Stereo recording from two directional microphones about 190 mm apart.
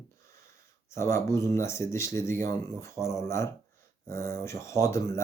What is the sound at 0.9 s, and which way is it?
Speech, 15° left (ahead or behind).